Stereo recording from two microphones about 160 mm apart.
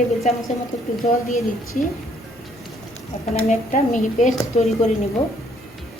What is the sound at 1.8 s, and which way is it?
Speech, 55° left (ahead or behind).